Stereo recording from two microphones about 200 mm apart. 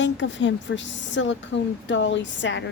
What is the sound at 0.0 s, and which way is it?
A woman's voice, 65° left (ahead or behind).